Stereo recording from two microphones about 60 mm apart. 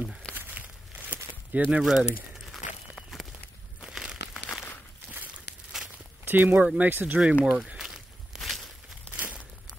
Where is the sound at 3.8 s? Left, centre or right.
Centre.